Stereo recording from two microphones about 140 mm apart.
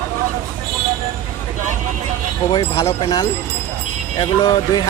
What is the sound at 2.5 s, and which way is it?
Speech, 30° left (ahead or behind).